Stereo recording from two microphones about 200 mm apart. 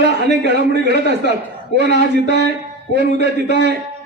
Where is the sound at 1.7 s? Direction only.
55° right (ahead or behind).